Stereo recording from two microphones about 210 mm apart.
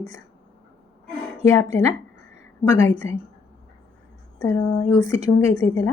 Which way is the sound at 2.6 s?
20° left (ahead or behind).